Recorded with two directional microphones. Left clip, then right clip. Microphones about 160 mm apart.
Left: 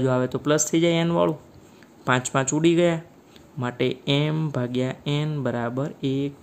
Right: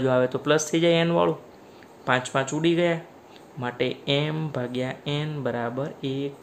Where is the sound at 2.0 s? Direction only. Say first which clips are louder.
Left 1 dB; 55° left (ahead or behind).